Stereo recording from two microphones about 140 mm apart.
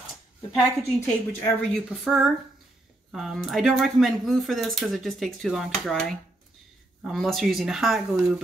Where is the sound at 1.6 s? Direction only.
5° left (ahead or behind).